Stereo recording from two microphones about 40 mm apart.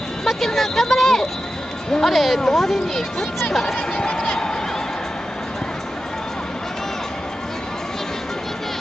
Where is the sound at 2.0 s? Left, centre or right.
Centre.